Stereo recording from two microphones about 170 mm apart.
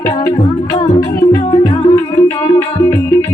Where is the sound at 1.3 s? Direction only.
30° left (ahead or behind).